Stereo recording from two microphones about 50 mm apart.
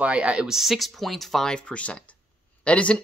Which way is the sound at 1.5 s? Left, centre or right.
Left.